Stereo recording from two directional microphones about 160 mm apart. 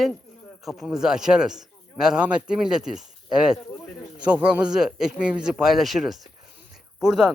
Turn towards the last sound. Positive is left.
turn(degrees=-5)  # may be behind; listen again after turning